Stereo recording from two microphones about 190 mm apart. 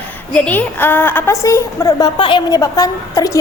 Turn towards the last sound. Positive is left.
turn(degrees=15)  # may be behind; listen again after turning